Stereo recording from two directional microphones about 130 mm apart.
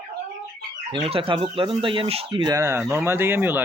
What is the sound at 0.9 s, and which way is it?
Speech, 45° right (ahead or behind).